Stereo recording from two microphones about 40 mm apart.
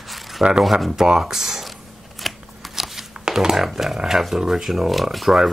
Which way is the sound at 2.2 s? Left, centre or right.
Centre.